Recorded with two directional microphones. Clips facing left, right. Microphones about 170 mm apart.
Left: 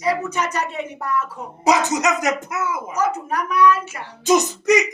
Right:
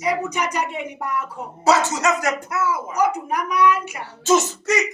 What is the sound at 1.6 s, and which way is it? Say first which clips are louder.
Speech: even; 15° left (ahead or behind).